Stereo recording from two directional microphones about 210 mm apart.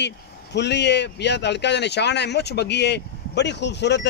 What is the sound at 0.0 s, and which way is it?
Speech, 55° left (ahead or behind).